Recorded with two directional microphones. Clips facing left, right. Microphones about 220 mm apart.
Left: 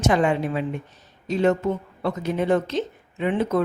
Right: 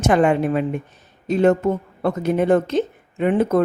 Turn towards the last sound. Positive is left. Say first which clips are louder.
# right 5 dB
turn(degrees=-50)  # may be behind; listen again after turning